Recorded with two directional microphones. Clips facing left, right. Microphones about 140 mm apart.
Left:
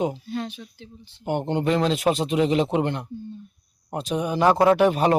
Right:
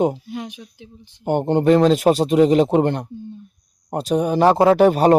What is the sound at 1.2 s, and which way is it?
Speech, 45° right (ahead or behind).